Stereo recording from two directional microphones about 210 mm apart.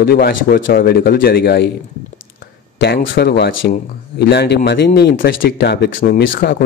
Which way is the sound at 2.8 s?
55° left (ahead or behind).